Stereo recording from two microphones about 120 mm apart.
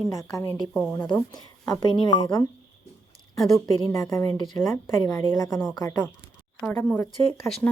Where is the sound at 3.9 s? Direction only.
25° left (ahead or behind).